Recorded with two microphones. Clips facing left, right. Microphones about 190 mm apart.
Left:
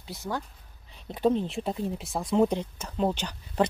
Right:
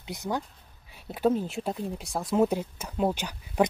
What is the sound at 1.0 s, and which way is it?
Speech, 5° right (ahead or behind).